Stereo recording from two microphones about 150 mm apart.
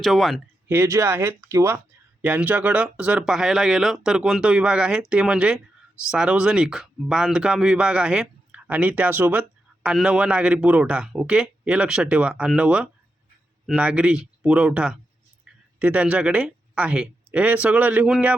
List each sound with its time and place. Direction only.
0.0 s speech: centre (ahead or behind)
0.7 s a man's voice: 15° right (ahead or behind)
15.5 s a sound: 5° right (ahead or behind)
15.8 s a man's voice: 10° right (ahead or behind)